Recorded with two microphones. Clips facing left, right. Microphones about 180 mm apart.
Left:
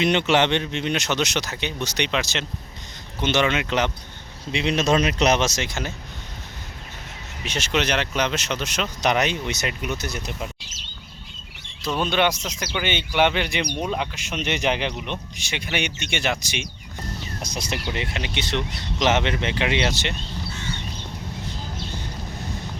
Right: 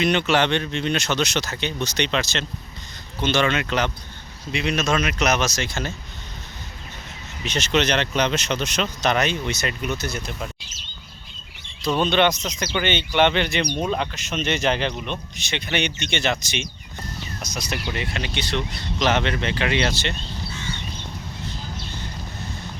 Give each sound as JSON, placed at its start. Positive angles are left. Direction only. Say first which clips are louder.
{"t": 0.0, "sound": "speech", "louder": "even", "side_deg": 20}
{"t": 7.4, "sound": "speech", "louder": "right 3 dB", "side_deg": 10}
{"t": 11.8, "sound": "speech", "louder": "right 3 dB", "side_deg": 5}
{"t": 17.4, "sound": "speech", "louder": "even", "side_deg": 30}